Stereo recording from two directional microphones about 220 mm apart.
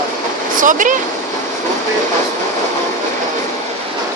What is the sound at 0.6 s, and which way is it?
Speech, 35° right (ahead or behind).